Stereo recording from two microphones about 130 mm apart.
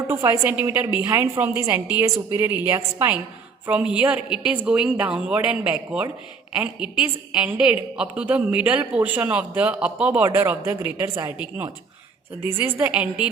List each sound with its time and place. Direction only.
0.1 s a woman's voice: 25° right (ahead or behind)
0.4 s a man's voice: 15° right (ahead or behind)